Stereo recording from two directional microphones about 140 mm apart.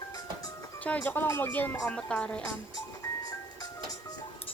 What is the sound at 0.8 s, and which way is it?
Speech, 10° left (ahead or behind).